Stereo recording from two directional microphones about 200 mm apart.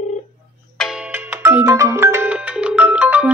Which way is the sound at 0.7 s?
5° right (ahead or behind).